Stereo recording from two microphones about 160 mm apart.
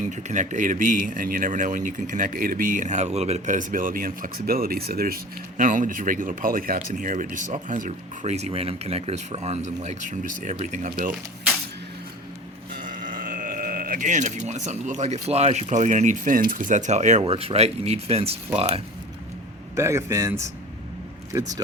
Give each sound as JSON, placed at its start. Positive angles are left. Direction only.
{"t": 0.1, "sound": "speech", "side_deg": -50}
{"t": 12.7, "sound": "speech", "side_deg": -55}
{"t": 19.7, "sound": "speech", "side_deg": -15}